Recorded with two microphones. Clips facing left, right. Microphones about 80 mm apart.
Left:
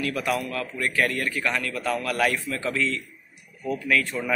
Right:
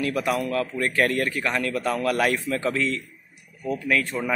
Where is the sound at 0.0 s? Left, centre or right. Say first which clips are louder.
Right 2 dB; right.